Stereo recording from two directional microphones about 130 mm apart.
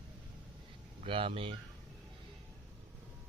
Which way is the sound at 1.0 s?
45° right (ahead or behind).